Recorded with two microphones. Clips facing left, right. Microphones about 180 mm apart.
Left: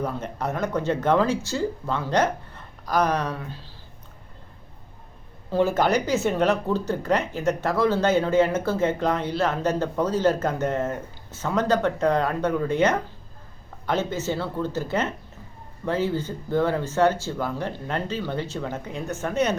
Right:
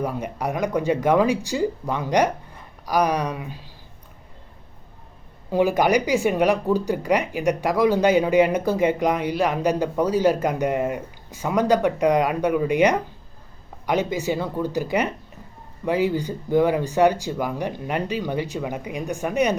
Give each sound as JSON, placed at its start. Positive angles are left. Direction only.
{"t": 0.0, "sound": "speech", "side_deg": -10}
{"t": 5.5, "sound": "speech", "side_deg": -15}